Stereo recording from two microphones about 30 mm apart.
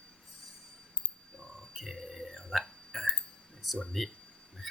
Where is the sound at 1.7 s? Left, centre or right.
Centre.